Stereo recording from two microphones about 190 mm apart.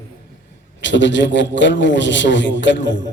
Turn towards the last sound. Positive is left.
turn(degrees=70)  # may be behind; listen again after turning